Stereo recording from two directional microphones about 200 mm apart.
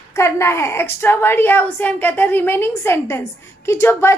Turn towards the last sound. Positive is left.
turn(degrees=15)  # may be behind; listen again after turning